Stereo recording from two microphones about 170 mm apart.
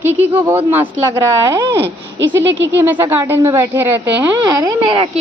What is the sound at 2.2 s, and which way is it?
Speech, 90° right.